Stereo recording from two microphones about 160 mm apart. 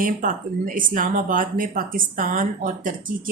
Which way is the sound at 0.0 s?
60° right (ahead or behind).